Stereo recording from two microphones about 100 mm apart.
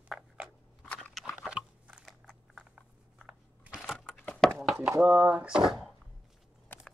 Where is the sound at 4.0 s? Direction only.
10° left (ahead or behind).